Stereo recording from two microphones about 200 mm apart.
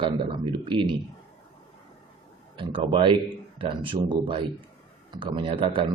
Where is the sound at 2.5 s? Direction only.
25° right (ahead or behind).